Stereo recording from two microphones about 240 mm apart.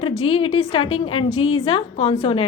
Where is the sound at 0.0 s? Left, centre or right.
Left.